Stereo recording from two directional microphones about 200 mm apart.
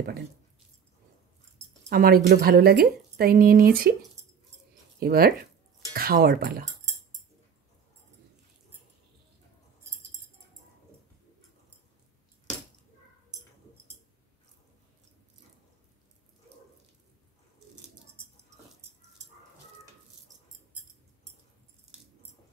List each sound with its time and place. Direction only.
1.9 s a woman's voice: 50° right (ahead or behind)